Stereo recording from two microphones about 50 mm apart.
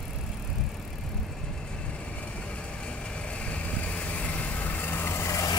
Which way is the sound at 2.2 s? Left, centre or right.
Left.